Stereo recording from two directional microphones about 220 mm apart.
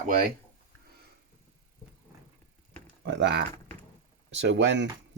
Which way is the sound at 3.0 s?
55° right (ahead or behind).